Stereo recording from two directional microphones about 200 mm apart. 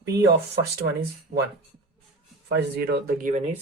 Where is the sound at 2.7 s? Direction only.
50° right (ahead or behind).